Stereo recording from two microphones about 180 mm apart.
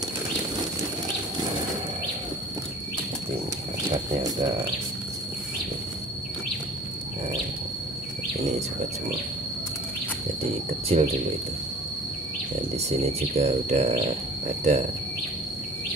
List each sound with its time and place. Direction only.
10.7 s speech: 35° right (ahead or behind)
12.7 s speech: 35° right (ahead or behind)